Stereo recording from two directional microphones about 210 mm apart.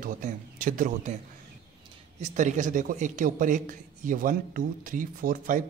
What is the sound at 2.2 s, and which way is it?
A man's voice, 35° right (ahead or behind).